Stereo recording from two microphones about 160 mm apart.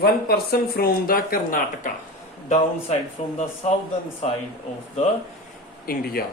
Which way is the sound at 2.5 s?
40° left (ahead or behind).